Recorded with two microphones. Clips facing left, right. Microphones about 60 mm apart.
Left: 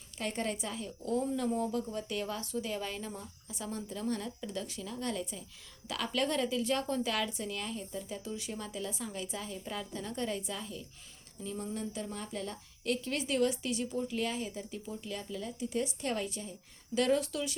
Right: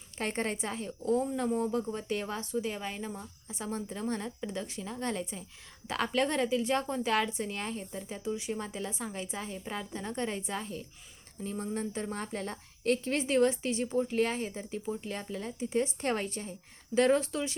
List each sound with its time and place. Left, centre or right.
0.2 s a woman's voice: right
8.2 s a woman's voice: right